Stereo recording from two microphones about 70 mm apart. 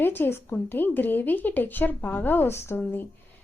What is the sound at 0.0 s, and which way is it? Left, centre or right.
A woman's voice, left.